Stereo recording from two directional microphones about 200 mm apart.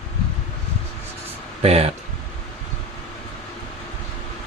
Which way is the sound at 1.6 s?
30° right (ahead or behind).